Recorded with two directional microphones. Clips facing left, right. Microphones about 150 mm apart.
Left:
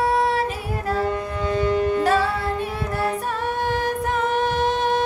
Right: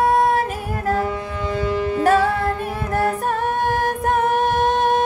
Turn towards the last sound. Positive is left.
turn(degrees=-50)  # may be behind; listen again after turning